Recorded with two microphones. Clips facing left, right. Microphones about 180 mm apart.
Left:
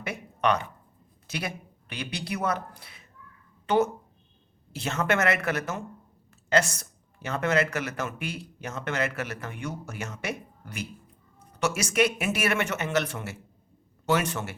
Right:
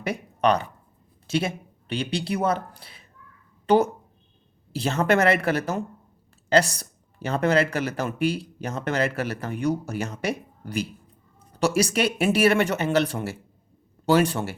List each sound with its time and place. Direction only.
0.0 s speech: 35° right (ahead or behind)
4.7 s speech: 35° right (ahead or behind)